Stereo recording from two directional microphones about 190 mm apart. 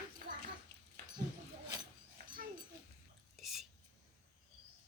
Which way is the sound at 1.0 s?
55° right (ahead or behind).